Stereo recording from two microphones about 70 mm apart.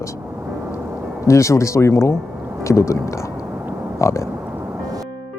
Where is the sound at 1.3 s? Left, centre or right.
Left.